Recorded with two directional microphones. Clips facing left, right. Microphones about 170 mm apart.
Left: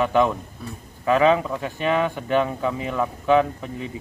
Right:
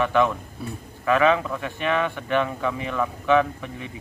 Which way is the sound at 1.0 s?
30° left (ahead or behind).